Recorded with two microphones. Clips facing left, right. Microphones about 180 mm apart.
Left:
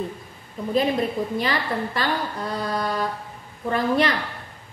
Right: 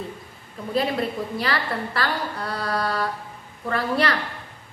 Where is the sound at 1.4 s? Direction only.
20° left (ahead or behind).